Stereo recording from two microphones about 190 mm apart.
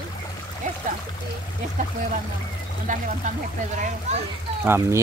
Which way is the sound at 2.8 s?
45° right (ahead or behind).